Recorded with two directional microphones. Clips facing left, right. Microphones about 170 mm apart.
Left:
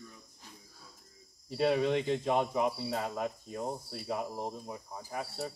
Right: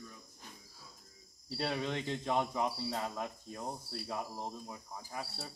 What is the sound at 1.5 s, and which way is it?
Speech, 10° left (ahead or behind).